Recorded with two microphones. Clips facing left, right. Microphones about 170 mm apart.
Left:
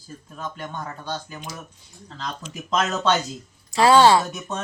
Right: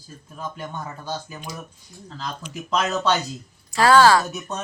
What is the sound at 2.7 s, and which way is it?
Speech, centre (ahead or behind).